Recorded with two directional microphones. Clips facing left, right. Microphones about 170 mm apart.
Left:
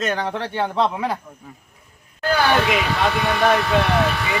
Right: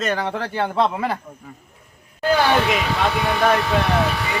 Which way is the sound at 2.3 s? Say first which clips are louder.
Right 1 dB; 15° right (ahead or behind).